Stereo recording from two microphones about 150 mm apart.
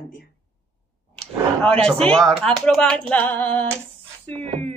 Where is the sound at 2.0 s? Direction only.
5° left (ahead or behind).